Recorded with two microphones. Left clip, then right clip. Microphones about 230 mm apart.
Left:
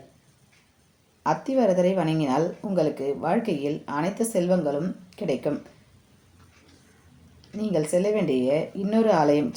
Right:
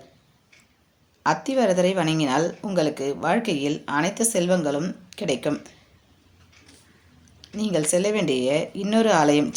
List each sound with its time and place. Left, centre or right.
1.2 s speech: right
7.5 s speech: right